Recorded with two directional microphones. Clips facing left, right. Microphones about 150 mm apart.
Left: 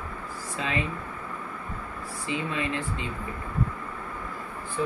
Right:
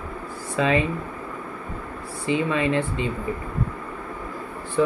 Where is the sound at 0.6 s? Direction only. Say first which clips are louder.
Right 11 dB; 70° right (ahead or behind).